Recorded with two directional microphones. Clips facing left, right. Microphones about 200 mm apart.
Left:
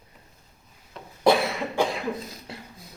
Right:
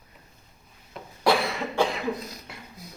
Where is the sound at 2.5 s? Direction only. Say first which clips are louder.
Left 4 dB; 30° left (ahead or behind).